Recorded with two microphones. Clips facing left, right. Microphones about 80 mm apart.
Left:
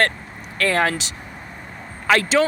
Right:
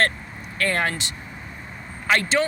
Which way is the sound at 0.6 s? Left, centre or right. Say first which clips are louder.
Left 4 dB; left.